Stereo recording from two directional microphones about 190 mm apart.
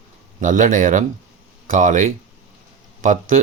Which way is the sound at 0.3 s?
45° right (ahead or behind).